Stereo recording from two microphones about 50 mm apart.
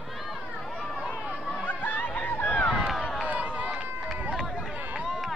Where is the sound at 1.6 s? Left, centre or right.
Left.